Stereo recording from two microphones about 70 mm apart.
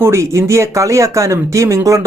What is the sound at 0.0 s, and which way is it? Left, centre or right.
Speech, right.